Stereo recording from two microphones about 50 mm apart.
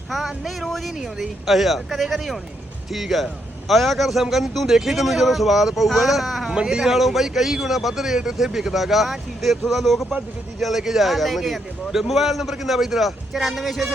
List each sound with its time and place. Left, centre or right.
0.1 s a man's voice: centre
6.6 s a man's voice: centre
6.9 s a man's voice: centre